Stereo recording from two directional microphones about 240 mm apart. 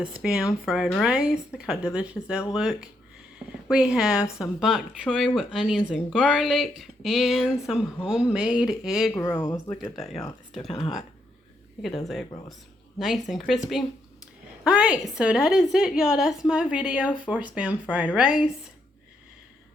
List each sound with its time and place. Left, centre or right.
0.0 s a woman's voice: centre
9.2 s a woman's voice: centre
10.7 s speech: left
13.0 s a woman's voice: centre